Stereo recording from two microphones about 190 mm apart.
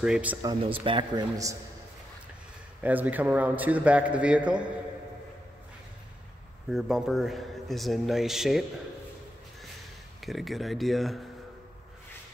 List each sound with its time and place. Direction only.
0.0 s speech: 5° right (ahead or behind)
0.4 s speech: 20° right (ahead or behind)
2.8 s a man's voice: 10° right (ahead or behind)
6.7 s speech: centre (ahead or behind)
10.2 s speech: centre (ahead or behind)